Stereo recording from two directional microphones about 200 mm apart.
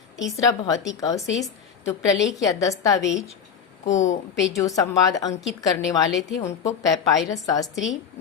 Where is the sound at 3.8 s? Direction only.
35° left (ahead or behind).